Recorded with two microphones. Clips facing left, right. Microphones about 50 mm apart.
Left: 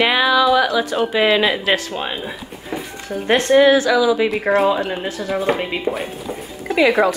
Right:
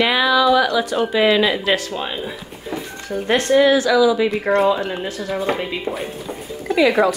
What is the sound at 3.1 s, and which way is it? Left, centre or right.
Speech, centre.